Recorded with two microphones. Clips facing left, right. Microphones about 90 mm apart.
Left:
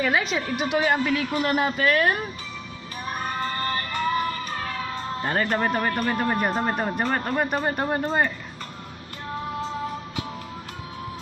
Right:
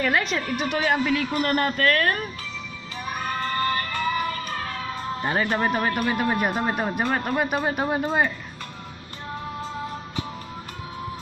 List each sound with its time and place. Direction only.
0.0 s speech: 5° left (ahead or behind)
3.2 s music: 25° left (ahead or behind)
4.9 s speech: 5° right (ahead or behind)